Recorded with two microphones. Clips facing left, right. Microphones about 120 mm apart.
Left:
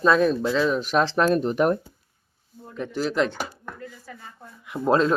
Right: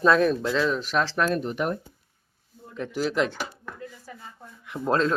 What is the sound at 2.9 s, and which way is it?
Speech, 5° right (ahead or behind).